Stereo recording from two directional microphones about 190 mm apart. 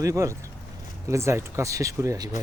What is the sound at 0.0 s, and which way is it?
Speech, 15° right (ahead or behind).